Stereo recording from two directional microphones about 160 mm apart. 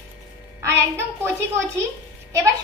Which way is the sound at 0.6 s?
15° right (ahead or behind).